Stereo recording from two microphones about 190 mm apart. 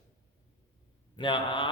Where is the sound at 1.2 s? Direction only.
25° left (ahead or behind).